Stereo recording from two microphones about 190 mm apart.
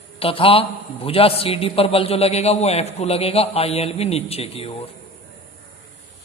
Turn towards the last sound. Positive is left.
turn(degrees=30)  # may be behind; listen again after turning